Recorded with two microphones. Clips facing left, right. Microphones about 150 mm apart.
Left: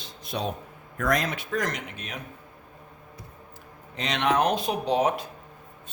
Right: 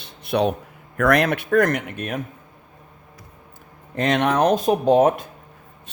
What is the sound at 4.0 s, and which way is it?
Speech, 50° right (ahead or behind).